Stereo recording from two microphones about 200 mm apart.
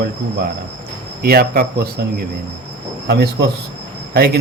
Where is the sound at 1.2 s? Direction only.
50° right (ahead or behind).